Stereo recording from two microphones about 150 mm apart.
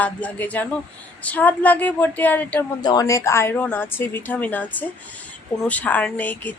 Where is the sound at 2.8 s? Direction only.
25° left (ahead or behind).